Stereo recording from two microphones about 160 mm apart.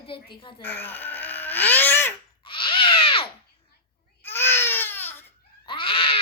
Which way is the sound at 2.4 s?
30° left (ahead or behind).